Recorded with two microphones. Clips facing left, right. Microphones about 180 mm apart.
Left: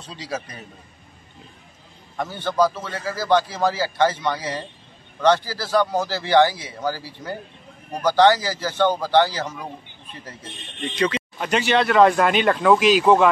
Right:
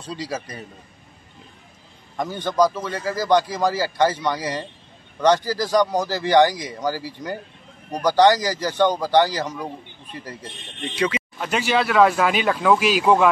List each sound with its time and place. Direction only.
0.0 s a man's voice: 10° right (ahead or behind)
2.1 s a man's voice: 15° right (ahead or behind)